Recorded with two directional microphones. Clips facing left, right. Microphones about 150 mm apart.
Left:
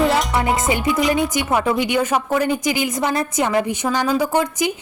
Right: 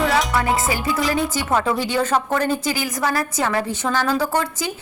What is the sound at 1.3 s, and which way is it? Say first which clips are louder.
A woman's voice: left 2 dB; 15° left (ahead or behind).